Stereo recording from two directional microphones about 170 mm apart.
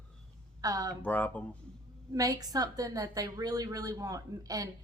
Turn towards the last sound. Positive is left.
turn(degrees=-20)  # may be behind; listen again after turning